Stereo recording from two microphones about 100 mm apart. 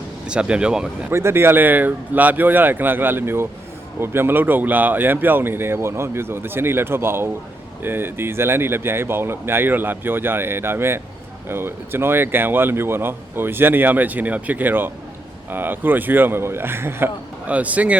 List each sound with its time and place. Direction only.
0.3 s speech: 10° right (ahead or behind)
1.1 s speech: 25° right (ahead or behind)